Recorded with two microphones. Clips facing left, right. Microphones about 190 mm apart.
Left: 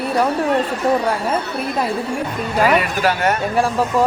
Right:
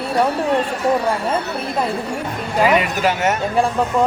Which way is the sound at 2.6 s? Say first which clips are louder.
Even; 20° right (ahead or behind).